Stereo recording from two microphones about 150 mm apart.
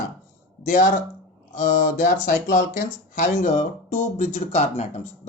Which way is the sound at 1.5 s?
60° left (ahead or behind).